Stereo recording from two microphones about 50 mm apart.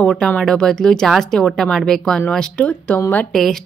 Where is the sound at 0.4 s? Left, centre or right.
Centre.